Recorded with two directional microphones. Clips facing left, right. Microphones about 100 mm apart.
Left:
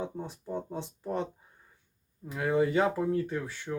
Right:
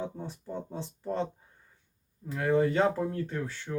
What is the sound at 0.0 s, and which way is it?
Speech, 15° left (ahead or behind).